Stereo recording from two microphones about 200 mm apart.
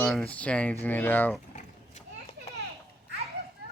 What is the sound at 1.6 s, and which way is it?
Children playing, 35° left (ahead or behind).